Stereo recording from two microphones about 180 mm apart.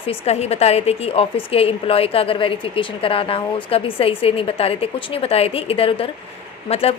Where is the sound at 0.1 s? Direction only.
35° left (ahead or behind).